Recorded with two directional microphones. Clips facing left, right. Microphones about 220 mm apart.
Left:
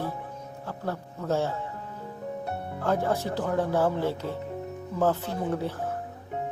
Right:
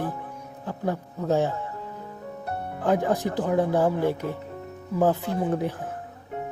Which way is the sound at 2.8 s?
15° right (ahead or behind).